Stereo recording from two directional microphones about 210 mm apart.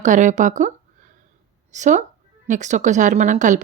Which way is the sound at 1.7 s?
35° right (ahead or behind).